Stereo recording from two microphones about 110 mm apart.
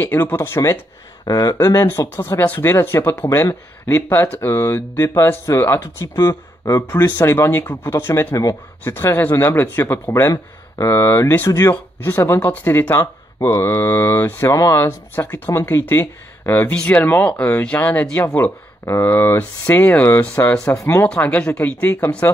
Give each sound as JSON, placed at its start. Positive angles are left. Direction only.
{"t": 0.0, "sound": "speech", "side_deg": 20}
{"t": 1.2, "sound": "speech", "side_deg": 35}
{"t": 1.9, "sound": "speech", "side_deg": 20}
{"t": 7.1, "sound": "speech", "side_deg": 20}
{"t": 7.8, "sound": "speech", "side_deg": 25}
{"t": 12.9, "sound": "speech", "side_deg": 30}
{"t": 20.6, "sound": "speech", "side_deg": 25}
{"t": 21.1, "sound": "speech", "side_deg": 10}